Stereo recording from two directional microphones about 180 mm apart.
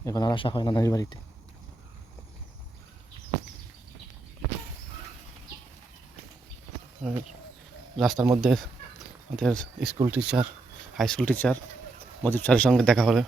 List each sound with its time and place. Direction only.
0.0 s speech: 20° left (ahead or behind)
7.0 s speech: centre (ahead or behind)